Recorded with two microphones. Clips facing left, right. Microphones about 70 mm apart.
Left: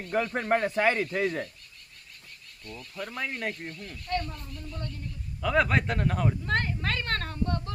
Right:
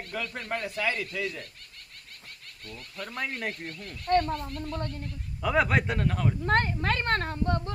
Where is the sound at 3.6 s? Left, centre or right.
Right.